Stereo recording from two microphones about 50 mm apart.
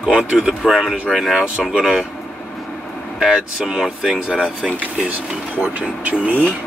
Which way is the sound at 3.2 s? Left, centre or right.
Centre.